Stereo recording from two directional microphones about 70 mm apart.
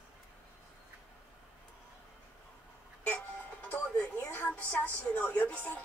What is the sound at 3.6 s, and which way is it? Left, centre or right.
Music, centre.